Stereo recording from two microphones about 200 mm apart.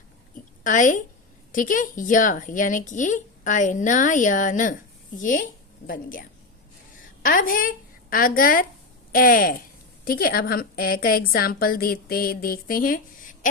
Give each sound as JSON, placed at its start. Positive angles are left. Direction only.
{"t": 0.6, "sound": "a woman's voice", "side_deg": 40}